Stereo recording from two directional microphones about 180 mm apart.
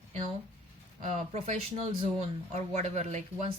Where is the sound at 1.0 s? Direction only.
40° right (ahead or behind).